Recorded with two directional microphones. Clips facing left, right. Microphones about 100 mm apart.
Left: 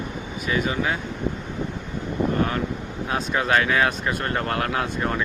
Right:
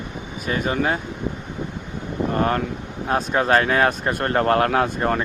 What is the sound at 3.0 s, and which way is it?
Speech, 40° right (ahead or behind).